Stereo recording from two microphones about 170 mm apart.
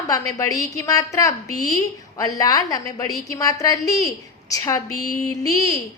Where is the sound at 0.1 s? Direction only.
20° left (ahead or behind).